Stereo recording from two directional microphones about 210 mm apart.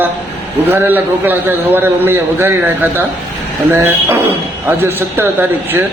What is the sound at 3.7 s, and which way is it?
A man's voice, 10° right (ahead or behind).